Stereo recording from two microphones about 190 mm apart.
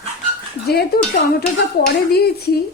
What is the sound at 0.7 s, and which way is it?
Speech, 55° left (ahead or behind).